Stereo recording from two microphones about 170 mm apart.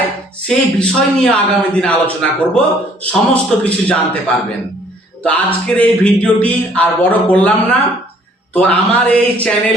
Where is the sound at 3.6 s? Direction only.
10° left (ahead or behind).